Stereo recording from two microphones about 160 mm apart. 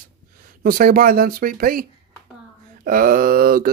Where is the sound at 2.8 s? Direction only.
60° right (ahead or behind).